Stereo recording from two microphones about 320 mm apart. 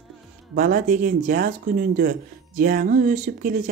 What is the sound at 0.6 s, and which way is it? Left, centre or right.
Speech, right.